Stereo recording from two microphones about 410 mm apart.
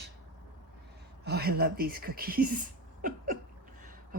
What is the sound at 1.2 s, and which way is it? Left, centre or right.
Speech, right.